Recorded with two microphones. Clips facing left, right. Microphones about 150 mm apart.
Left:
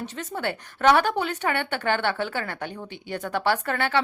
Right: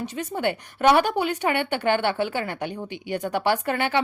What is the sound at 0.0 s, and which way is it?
A woman's voice, 10° right (ahead or behind).